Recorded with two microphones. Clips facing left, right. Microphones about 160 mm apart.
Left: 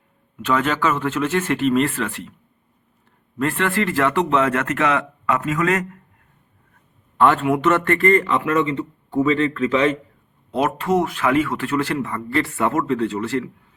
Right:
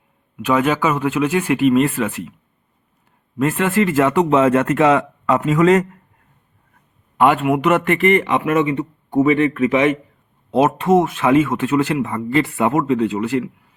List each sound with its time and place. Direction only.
0.3 s speech: 15° right (ahead or behind)
3.3 s speech: 20° right (ahead or behind)
7.2 s speech: 15° right (ahead or behind)